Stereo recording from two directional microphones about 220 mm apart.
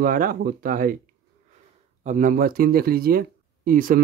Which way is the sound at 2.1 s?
35° right (ahead or behind).